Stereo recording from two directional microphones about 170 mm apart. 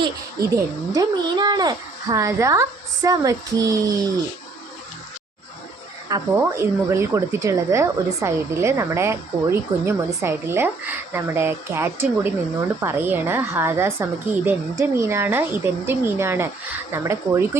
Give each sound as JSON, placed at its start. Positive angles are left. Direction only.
{"t": 0.5, "sound": "speech", "side_deg": -20}
{"t": 6.3, "sound": "speech", "side_deg": -15}